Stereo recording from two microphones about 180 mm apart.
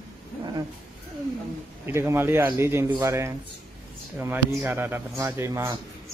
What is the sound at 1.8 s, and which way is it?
A woman's voice, 15° right (ahead or behind).